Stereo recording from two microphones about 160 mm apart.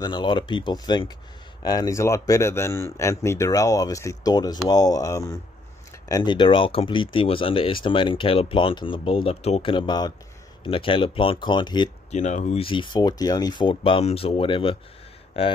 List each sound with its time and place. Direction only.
0.0 s a man's voice: 30° left (ahead or behind)
12.1 s speech: 45° left (ahead or behind)